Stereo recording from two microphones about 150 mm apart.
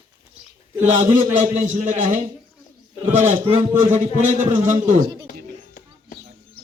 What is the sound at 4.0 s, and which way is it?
A man's voice, 55° right (ahead or behind).